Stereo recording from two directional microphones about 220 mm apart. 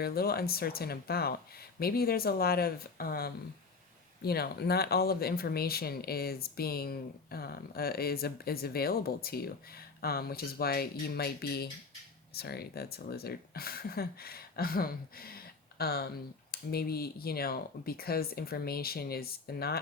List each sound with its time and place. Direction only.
0.0 s speech: 45° left (ahead or behind)